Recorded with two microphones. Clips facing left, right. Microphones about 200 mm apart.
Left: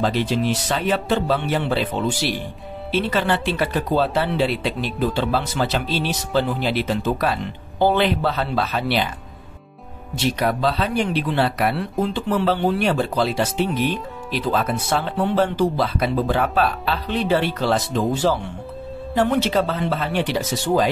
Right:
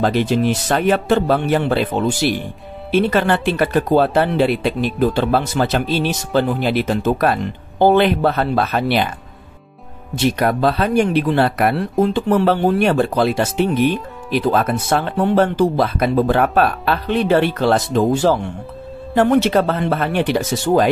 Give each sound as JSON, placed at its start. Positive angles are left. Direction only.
{"t": 0.0, "sound": "speech", "side_deg": -50}
{"t": 10.1, "sound": "speech", "side_deg": -50}